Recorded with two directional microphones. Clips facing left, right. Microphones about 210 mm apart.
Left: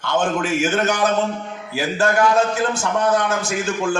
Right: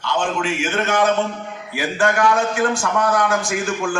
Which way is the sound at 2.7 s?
20° left (ahead or behind).